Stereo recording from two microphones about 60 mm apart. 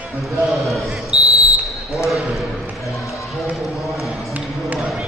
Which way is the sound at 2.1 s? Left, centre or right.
Centre.